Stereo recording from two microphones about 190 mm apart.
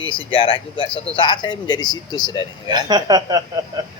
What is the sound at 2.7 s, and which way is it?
Speech, 20° right (ahead or behind).